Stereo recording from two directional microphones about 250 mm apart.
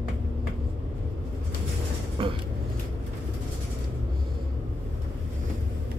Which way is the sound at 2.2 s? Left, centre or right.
Right.